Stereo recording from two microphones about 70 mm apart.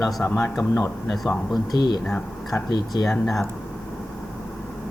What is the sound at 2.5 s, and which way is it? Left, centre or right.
Speech, left.